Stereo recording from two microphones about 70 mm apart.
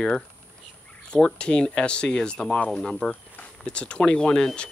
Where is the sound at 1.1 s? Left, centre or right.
Centre.